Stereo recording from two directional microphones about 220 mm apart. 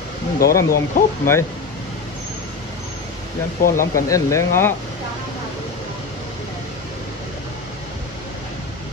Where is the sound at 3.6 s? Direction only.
40° left (ahead or behind).